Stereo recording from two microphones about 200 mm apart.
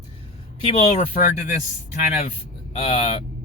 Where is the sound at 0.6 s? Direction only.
30° left (ahead or behind).